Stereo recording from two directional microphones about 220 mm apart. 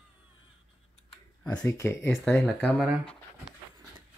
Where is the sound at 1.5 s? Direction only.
10° left (ahead or behind).